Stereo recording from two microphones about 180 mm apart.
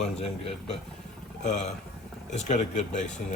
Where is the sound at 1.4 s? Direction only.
40° left (ahead or behind).